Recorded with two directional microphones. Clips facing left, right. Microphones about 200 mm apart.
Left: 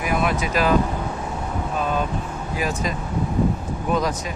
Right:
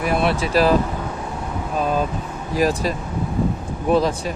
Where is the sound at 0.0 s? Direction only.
35° right (ahead or behind).